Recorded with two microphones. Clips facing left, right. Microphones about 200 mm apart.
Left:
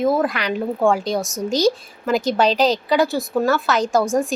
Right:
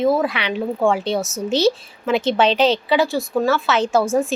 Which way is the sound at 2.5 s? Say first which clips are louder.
Right 1 dB; 40° left (ahead or behind).